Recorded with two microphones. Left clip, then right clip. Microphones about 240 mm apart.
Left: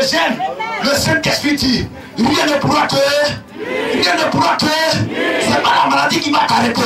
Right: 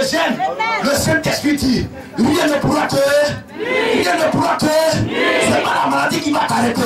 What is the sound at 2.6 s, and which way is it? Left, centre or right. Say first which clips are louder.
Music: left 3 dB; left.